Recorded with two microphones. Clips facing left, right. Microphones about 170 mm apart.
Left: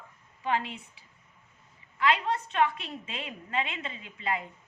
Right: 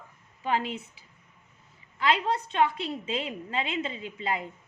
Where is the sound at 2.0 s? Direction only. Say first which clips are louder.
Right 1 dB; 35° right (ahead or behind).